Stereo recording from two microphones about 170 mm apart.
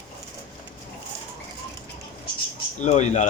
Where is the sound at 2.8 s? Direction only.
45° left (ahead or behind).